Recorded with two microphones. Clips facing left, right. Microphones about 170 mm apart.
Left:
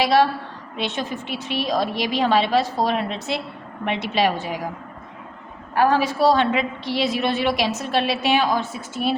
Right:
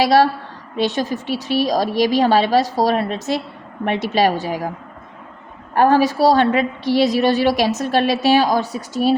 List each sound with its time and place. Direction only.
0.0 s a woman's voice: 40° right (ahead or behind)
5.7 s a woman's voice: 45° right (ahead or behind)